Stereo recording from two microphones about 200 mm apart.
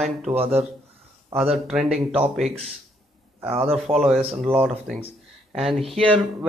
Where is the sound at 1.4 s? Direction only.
Centre (ahead or behind).